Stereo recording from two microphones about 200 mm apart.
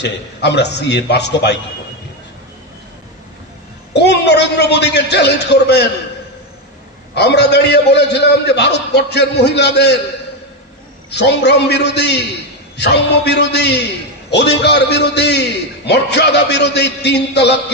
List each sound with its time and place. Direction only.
0.0 s a man's voice: 60° left (ahead or behind)
3.9 s a sound: 55° left (ahead or behind)
7.2 s a man's voice: 55° left (ahead or behind)
11.1 s a man's voice: 55° left (ahead or behind)